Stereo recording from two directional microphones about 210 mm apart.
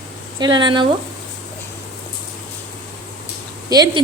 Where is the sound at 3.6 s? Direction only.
20° right (ahead or behind).